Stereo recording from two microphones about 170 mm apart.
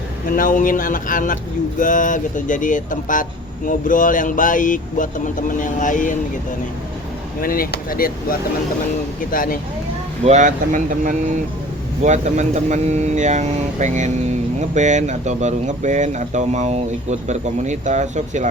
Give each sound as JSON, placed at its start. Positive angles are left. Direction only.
{"t": 0.3, "sound": "speech", "side_deg": 55}
{"t": 7.4, "sound": "speech", "side_deg": 60}
{"t": 10.2, "sound": "speech", "side_deg": -45}